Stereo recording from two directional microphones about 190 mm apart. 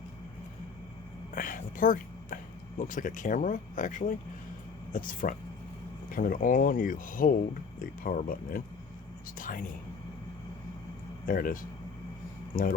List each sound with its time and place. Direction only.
1.4 s speech: 45° left (ahead or behind)
11.3 s speech: 45° left (ahead or behind)